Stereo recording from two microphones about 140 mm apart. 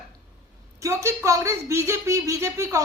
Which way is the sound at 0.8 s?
20° right (ahead or behind).